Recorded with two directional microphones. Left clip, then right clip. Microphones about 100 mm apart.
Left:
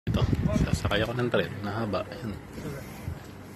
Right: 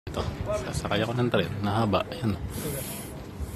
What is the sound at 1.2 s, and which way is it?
Speech, 25° right (ahead or behind).